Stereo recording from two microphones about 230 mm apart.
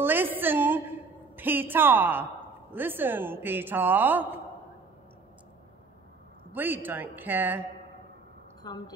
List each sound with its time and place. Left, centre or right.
0.0 s a sound: centre
1.3 s a woman's voice: centre
6.5 s a woman's voice: centre
8.6 s a woman's voice: centre